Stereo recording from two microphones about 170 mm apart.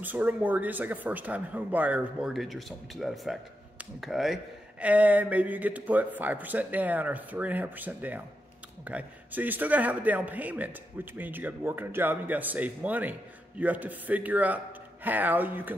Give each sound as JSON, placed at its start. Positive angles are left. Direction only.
{"t": 0.0, "sound": "speech", "side_deg": -10}